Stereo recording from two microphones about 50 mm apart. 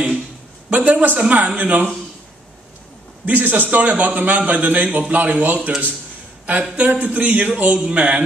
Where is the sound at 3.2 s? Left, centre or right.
Right.